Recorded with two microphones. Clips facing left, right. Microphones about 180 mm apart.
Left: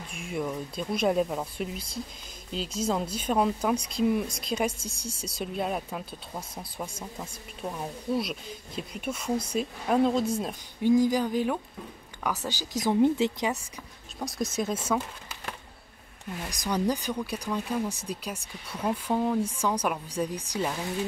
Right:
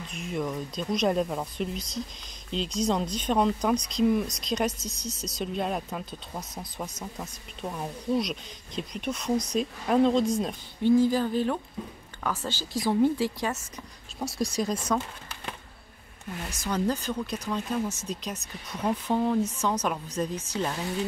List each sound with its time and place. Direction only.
0.3 s speech: 5° left (ahead or behind)
7.6 s speech: centre (ahead or behind); by 13.6 s 20° left (ahead or behind)
14.2 s speech: centre (ahead or behind)
16.4 s speech: 15° left (ahead or behind)